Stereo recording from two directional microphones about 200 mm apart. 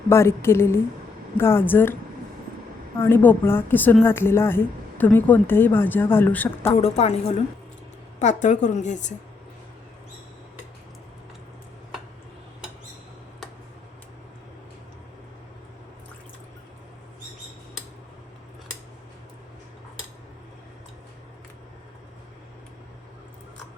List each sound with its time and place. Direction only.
0.1 s a woman's voice: 15° left (ahead or behind)
3.0 s a woman's voice: 10° left (ahead or behind)
6.7 s a woman's voice: 30° left (ahead or behind)